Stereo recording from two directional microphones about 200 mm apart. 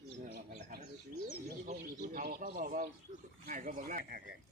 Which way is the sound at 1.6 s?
45° right (ahead or behind).